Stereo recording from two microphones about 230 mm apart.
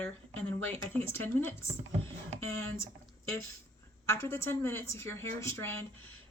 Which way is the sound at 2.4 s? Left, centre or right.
Right.